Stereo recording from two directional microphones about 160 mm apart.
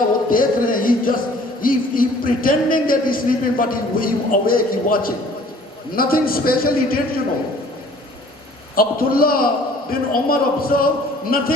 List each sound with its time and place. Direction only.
0.3 s music: 60° left (ahead or behind)
1.6 s a man's voice: 60° left (ahead or behind)
8.7 s a man's voice: 65° left (ahead or behind)